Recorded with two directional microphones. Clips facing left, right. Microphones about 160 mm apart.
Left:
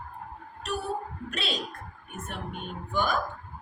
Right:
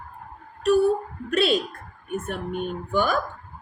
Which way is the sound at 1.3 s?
55° right (ahead or behind).